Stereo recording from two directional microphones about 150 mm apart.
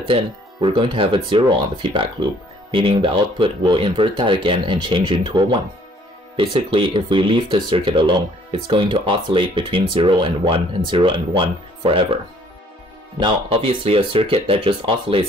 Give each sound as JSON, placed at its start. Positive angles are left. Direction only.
{"t": 0.1, "sound": "speech", "side_deg": -35}
{"t": 13.2, "sound": "speech", "side_deg": -40}